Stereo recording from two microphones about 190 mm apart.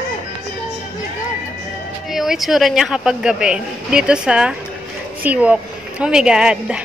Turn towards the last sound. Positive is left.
turn(degrees=-5)  # may be behind; listen again after turning